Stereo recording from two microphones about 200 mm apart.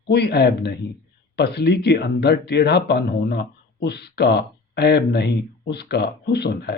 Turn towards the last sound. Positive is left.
turn(degrees=55)  # may be behind; listen again after turning